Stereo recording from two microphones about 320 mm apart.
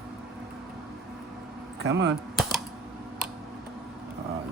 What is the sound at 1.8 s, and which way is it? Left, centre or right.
Speech, right.